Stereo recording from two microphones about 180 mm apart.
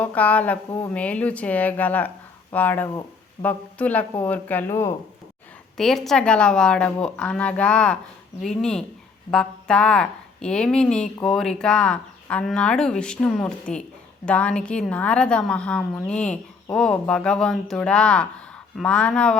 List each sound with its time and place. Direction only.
0.0 s speech: 10° left (ahead or behind)
5.7 s a woman's voice: centre (ahead or behind)